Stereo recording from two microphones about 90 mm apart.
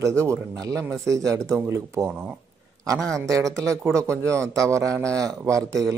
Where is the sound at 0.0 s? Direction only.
30° right (ahead or behind).